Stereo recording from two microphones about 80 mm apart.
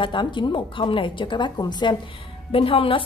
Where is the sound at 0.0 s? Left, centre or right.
Left.